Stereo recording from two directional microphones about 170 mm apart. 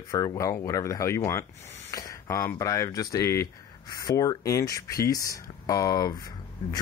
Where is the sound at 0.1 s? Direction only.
20° left (ahead or behind).